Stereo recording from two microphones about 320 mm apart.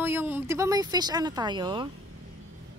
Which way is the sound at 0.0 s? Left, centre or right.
Centre.